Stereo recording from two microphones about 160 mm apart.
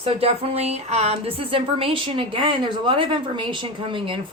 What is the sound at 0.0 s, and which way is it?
Speech, 40° right (ahead or behind).